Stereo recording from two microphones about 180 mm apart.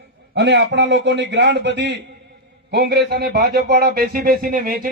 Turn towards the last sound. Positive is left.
turn(degrees=-55)  # may be behind; listen again after turning